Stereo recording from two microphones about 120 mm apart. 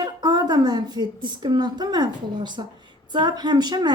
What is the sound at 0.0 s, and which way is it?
A woman's voice, 35° right (ahead or behind).